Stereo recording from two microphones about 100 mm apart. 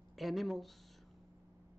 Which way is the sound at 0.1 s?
Centre (ahead or behind).